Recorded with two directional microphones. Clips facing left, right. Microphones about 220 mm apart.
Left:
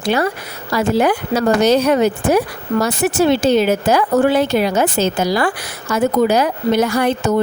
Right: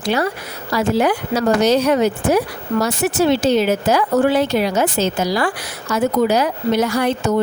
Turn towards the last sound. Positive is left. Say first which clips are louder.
# left 2 dB
turn(degrees=55)  # may be behind; listen again after turning